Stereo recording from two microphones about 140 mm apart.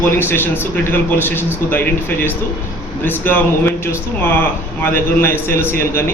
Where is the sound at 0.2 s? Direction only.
15° left (ahead or behind).